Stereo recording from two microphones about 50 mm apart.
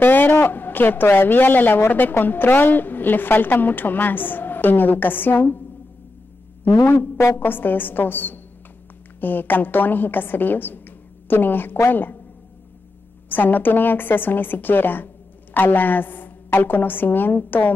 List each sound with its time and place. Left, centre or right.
0.0 s a woman's voice: left
6.7 s a man's voice: left
13.3 s a woman's voice: left